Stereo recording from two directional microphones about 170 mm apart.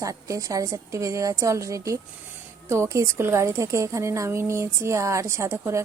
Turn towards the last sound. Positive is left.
turn(degrees=-15)  # may be behind; listen again after turning